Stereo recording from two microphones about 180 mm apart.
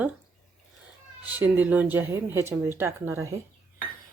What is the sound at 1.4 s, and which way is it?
Speech, 10° right (ahead or behind).